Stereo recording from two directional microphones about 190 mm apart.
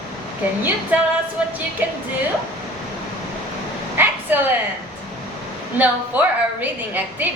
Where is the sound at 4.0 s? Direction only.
10° right (ahead or behind).